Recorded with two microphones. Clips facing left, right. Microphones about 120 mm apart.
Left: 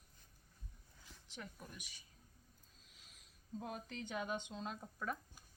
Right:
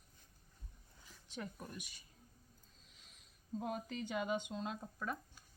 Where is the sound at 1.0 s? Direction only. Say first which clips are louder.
Right 5 dB; 10° right (ahead or behind).